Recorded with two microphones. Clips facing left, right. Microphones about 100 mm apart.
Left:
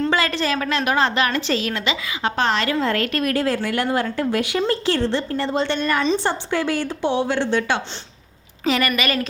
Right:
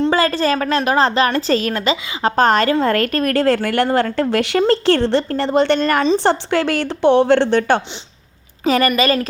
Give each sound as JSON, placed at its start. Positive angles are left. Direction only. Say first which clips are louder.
{"t": 0.0, "sound": "a woman's voice", "louder": "right 5 dB", "side_deg": -35}
{"t": 3.3, "sound": "a woman's voice", "louder": "right 6 dB", "side_deg": -60}
{"t": 5.9, "sound": "a woman's voice", "louder": "right 4 dB", "side_deg": -40}
{"t": 6.1, "sound": "a woman's voice", "louder": "right 6 dB", "side_deg": -70}
{"t": 8.6, "sound": "a woman's voice", "louder": "right 6 dB", "side_deg": -40}